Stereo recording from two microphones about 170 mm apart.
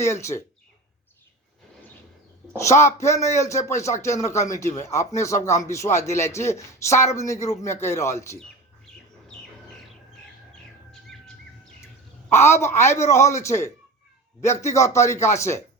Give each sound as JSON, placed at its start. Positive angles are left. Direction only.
{"t": 0.0, "sound": "speech", "side_deg": 15}
{"t": 2.6, "sound": "speech", "side_deg": 15}
{"t": 4.4, "sound": "speech", "side_deg": 45}
{"t": 4.9, "sound": "speech", "side_deg": 15}
{"t": 12.3, "sound": "speech", "side_deg": 15}